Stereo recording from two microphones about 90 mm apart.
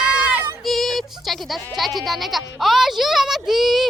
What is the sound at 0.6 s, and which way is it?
Music, centre (ahead or behind).